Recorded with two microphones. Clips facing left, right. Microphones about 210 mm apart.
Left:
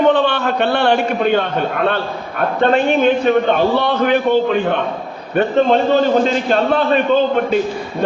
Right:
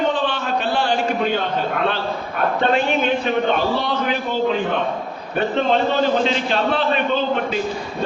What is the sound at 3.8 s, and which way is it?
Speech, 60° left (ahead or behind).